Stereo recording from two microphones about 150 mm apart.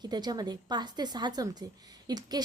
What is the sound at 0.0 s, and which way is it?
A woman's voice, 30° right (ahead or behind).